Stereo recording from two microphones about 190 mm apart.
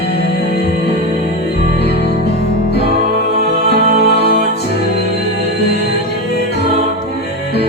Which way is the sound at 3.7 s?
50° right (ahead or behind).